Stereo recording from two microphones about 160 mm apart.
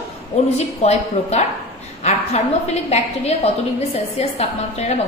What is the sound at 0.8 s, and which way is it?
Speech, 40° left (ahead or behind).